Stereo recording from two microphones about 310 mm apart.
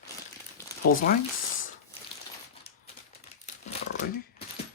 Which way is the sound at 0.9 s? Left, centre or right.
Left.